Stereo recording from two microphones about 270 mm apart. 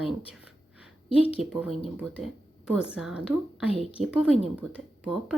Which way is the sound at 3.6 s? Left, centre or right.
Left.